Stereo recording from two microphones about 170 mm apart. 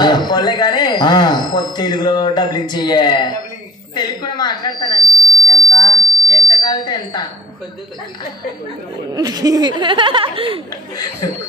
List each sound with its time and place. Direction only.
0.0 s speech: 25° left (ahead or behind)
5.7 s alarm: 30° left (ahead or behind)
9.1 s speech: 25° right (ahead or behind)